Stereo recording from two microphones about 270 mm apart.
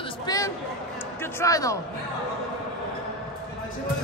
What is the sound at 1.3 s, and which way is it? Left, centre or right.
Speech, centre.